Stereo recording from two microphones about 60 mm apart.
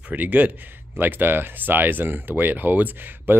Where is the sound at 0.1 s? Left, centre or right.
Right.